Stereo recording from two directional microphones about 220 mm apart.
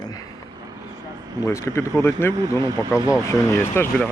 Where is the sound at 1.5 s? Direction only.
10° left (ahead or behind).